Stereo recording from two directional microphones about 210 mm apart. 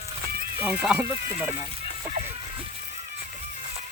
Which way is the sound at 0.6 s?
5° right (ahead or behind).